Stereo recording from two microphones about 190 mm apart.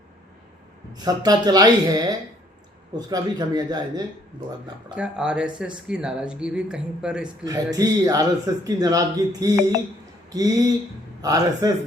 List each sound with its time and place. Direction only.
0.9 s speech: 20° right (ahead or behind)
4.9 s speech: 5° right (ahead or behind)
7.4 s speech: 20° right (ahead or behind)